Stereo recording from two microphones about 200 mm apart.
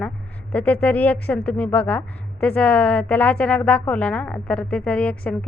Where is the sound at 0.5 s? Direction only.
5° left (ahead or behind).